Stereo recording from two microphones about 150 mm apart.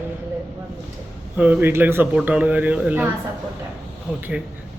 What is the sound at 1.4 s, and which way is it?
A man's voice, 10° right (ahead or behind).